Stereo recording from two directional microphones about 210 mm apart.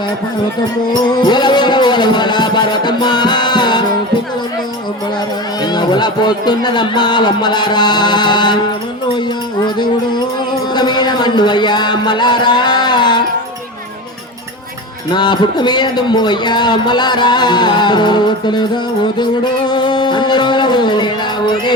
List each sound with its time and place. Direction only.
1.1 s music: 20° left (ahead or behind)
5.6 s music: 20° left (ahead or behind)
15.1 s music: 20° left (ahead or behind)